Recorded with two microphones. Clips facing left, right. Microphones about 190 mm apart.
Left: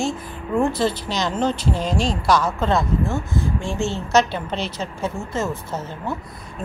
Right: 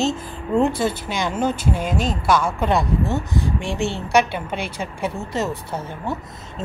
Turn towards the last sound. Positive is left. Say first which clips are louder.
# right 1 dB
turn(degrees=-20)  # may be behind; listen again after turning